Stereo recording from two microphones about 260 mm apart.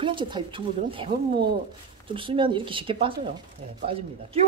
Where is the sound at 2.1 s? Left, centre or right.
Centre.